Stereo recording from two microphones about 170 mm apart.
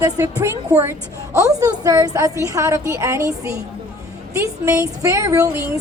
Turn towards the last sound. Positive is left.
turn(degrees=-15)  # may be behind; listen again after turning